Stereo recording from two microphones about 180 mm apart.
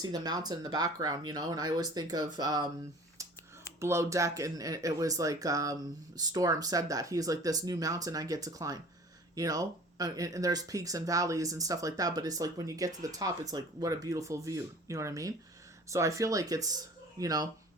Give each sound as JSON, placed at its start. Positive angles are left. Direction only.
{"t": 0.0, "sound": "speech", "side_deg": -20}
{"t": 3.2, "sound": "a sound", "side_deg": -20}
{"t": 3.8, "sound": "speech", "side_deg": -15}